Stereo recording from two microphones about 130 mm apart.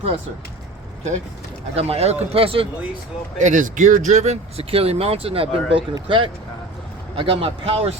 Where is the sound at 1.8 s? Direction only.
50° right (ahead or behind).